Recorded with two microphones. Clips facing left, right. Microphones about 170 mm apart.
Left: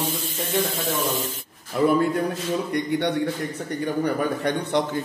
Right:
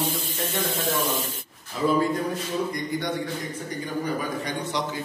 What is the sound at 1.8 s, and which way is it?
A man's voice, 60° left (ahead or behind).